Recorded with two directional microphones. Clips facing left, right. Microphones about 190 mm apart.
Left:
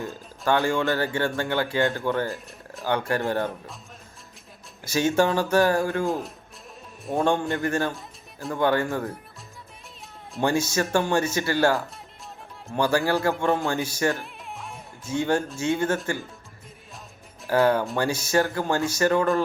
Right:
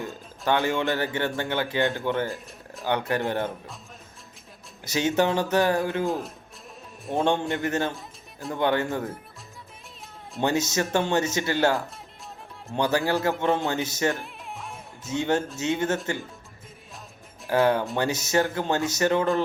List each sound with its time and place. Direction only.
0.4 s speech: 20° right (ahead or behind)
4.9 s speech: 20° right (ahead or behind)
6.1 s speech: centre (ahead or behind)
7.2 s speech: 20° right (ahead or behind)
7.9 s music: centre (ahead or behind)
8.5 s speech: 20° right (ahead or behind)
10.4 s speech: 20° right (ahead or behind)
14.2 s music: centre (ahead or behind)
15.0 s speech: 20° right (ahead or behind)
17.5 s speech: 20° right (ahead or behind)